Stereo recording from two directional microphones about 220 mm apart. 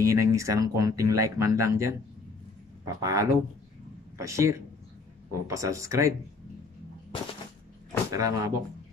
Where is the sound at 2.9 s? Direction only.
15° right (ahead or behind).